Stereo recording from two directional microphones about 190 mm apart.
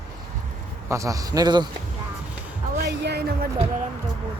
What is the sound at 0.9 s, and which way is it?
Speech, 15° right (ahead or behind).